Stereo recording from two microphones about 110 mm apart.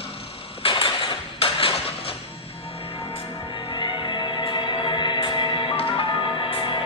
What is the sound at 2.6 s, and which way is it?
Music, 55° left (ahead or behind).